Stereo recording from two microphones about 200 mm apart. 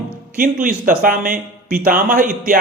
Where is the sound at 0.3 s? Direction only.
45° right (ahead or behind).